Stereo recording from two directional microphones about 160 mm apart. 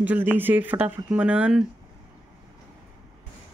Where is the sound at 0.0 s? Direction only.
10° right (ahead or behind).